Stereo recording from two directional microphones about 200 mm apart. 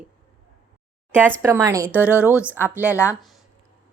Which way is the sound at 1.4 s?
15° right (ahead or behind).